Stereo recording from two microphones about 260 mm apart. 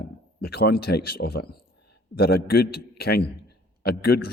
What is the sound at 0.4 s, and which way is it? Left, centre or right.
A man's voice, left.